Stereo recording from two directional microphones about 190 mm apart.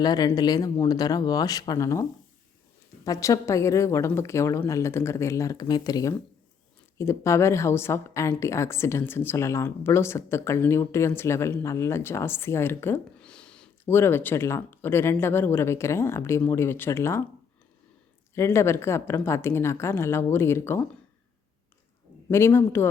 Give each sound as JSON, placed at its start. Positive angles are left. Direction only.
{"t": 0.0, "sound": "a woman's voice", "side_deg": 20}
{"t": 18.3, "sound": "a woman's voice", "side_deg": 15}
{"t": 22.3, "sound": "a woman's voice", "side_deg": 15}